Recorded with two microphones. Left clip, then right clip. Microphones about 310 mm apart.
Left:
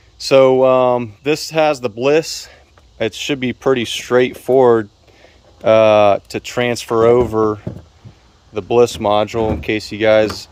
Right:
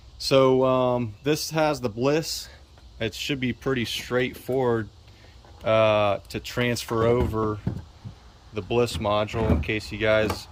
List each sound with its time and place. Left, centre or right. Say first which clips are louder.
0.2 s speech: left 9 dB; centre
7.3 s speech: left 11 dB; left
8.7 s speech: left 11 dB; centre